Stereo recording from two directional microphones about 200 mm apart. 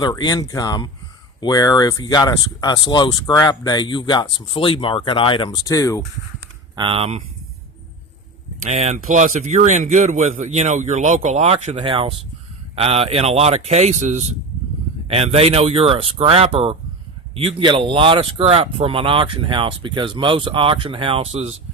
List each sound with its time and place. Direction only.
0.0 s speech: 20° left (ahead or behind)
6.7 s speech: 25° right (ahead or behind)
8.7 s speech: 35° right (ahead or behind)